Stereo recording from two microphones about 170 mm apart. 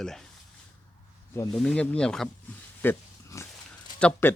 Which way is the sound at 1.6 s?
5° left (ahead or behind).